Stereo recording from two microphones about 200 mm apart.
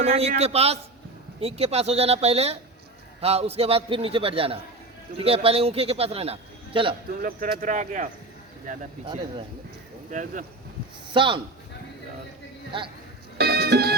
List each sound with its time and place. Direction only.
0.0 s a man's voice: 30° right (ahead or behind)
7.2 s speech: 45° right (ahead or behind)
10.1 s speech: 40° right (ahead or behind)
11.1 s a man's voice: 25° right (ahead or behind)
13.4 s music: 55° right (ahead or behind)